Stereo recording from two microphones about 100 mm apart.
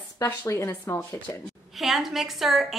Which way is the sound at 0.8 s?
30° left (ahead or behind).